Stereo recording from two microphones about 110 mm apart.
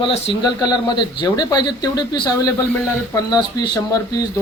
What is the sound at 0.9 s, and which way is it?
Speech, 40° left (ahead or behind).